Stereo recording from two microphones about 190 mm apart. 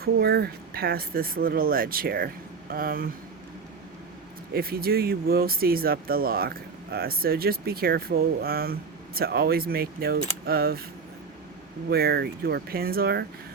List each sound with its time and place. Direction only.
0.0 s speech: 55° right (ahead or behind)
4.5 s speech: 55° right (ahead or behind)
11.9 s speech: 55° right (ahead or behind)